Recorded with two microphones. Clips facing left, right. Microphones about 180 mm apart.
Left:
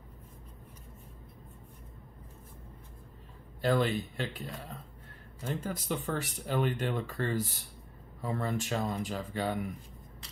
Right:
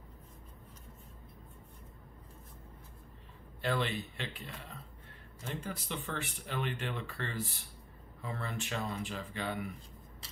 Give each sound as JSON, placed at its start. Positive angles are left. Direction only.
{"t": 3.6, "sound": "speech", "side_deg": 40}